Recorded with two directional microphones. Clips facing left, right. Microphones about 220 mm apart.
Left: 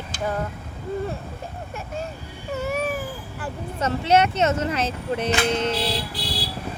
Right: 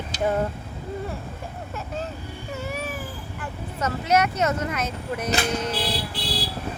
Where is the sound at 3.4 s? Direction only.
30° left (ahead or behind).